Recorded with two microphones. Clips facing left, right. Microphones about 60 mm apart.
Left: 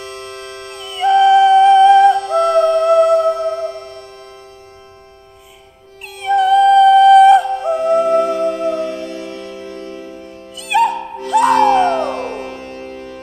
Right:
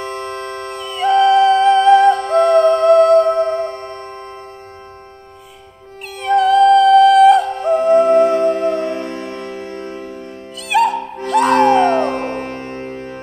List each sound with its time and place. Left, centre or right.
0.0 s music: right
0.9 s yodeling: centre
2.3 s a sound: right
2.9 s music: centre
3.3 s music: right
6.1 s music: centre
7.8 s music: right
10.6 s music: centre
11.5 s music: right